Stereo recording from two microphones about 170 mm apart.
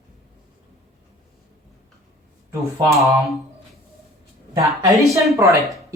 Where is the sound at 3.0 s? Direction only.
20° right (ahead or behind).